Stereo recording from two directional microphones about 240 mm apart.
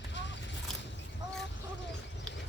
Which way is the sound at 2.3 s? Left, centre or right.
Centre.